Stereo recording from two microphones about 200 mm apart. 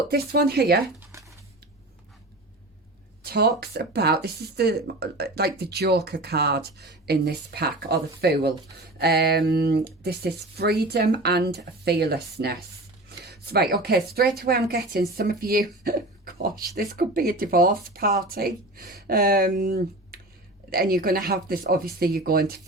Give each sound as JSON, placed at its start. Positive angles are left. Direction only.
{"t": 0.1, "sound": "speech", "side_deg": -50}
{"t": 3.2, "sound": "speech", "side_deg": -55}
{"t": 13.2, "sound": "speech", "side_deg": -55}